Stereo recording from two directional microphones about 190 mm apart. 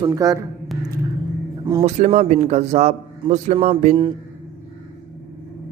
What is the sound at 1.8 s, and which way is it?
A man's voice, 35° right (ahead or behind).